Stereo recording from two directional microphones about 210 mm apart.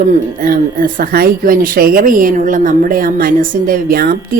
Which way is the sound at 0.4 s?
40° right (ahead or behind).